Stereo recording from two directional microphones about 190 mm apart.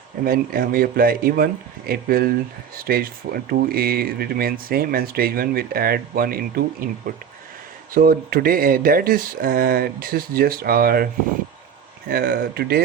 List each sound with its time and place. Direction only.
0.3 s speech: 50° right (ahead or behind)
7.9 s speech: 50° right (ahead or behind)